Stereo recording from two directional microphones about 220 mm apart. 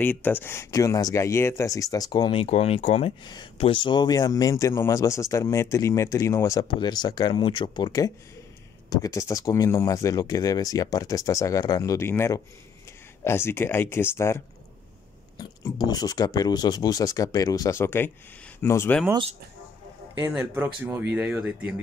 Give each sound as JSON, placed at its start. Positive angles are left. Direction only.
{"t": 0.0, "sound": "speech", "side_deg": 10}
{"t": 20.2, "sound": "speech", "side_deg": -10}